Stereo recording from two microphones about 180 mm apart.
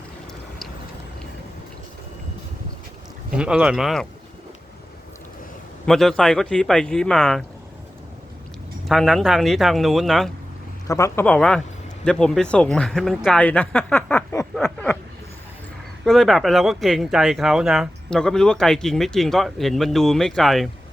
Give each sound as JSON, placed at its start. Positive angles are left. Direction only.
{"t": 3.3, "sound": "speech", "side_deg": -5}
{"t": 5.8, "sound": "speech", "side_deg": 0}
{"t": 8.9, "sound": "speech", "side_deg": 0}
{"t": 10.8, "sound": "speech", "side_deg": 15}
{"t": 16.0, "sound": "speech", "side_deg": 0}